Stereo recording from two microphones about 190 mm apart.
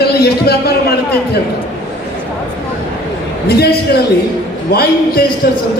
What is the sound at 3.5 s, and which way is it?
A man's voice, 55° left (ahead or behind).